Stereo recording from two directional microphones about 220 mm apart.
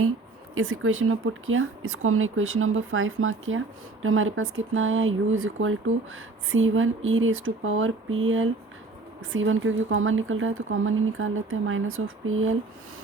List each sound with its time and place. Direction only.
0.5 s speech: 70° right (ahead or behind)